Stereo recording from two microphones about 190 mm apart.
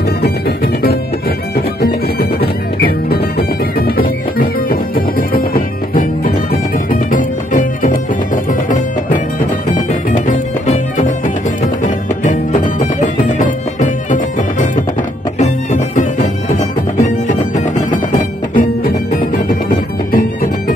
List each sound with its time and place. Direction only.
2.4 s music: 55° left (ahead or behind)
9.8 s music: 40° left (ahead or behind)
12.2 s music: 40° left (ahead or behind)
18.1 s music: 45° left (ahead or behind)